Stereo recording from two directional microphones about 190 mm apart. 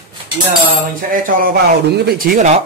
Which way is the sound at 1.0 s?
45° right (ahead or behind).